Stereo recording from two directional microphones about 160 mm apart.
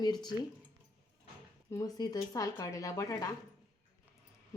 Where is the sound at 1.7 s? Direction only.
25° left (ahead or behind).